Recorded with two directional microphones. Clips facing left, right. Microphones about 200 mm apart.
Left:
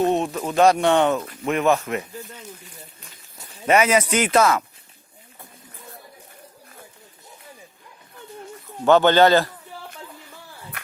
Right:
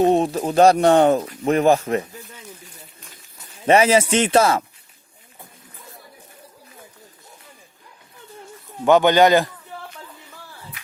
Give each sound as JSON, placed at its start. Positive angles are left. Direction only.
{"t": 0.0, "sound": "speech", "side_deg": -35}
{"t": 3.7, "sound": "speech", "side_deg": -30}
{"t": 8.8, "sound": "speech", "side_deg": -15}